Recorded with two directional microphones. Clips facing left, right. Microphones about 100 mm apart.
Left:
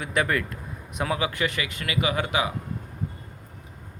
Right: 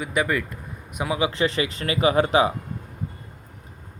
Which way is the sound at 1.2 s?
30° right (ahead or behind).